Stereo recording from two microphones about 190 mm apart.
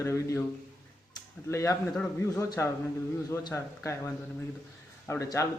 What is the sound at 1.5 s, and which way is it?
A man's voice, 15° left (ahead or behind).